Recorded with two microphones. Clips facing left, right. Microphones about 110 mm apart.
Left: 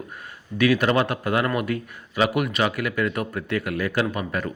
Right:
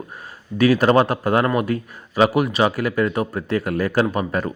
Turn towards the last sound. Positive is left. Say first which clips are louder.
# right 5 dB
turn(degrees=-35)  # may be behind; listen again after turning